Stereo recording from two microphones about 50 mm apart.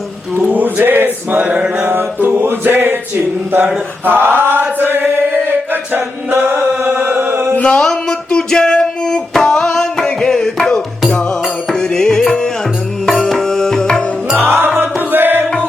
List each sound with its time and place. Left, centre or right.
0.5 s a sound: right
1.4 s mantra: right
2.2 s a sound: right
4.0 s chant: right
7.3 s chant: right
7.6 s music: left
14.3 s music: right